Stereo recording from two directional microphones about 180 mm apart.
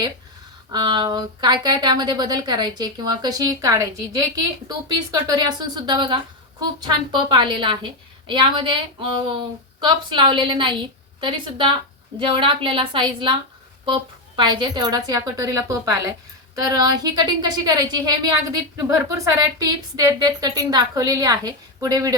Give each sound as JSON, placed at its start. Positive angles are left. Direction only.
{"t": 0.7, "sound": "a woman's voice", "side_deg": -25}